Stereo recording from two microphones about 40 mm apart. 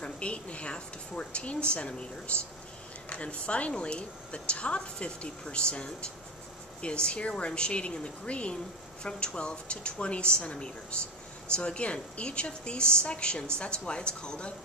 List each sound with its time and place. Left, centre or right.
0.0 s a woman's voice: left